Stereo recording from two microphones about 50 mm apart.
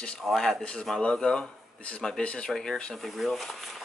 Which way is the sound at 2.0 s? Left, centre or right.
Centre.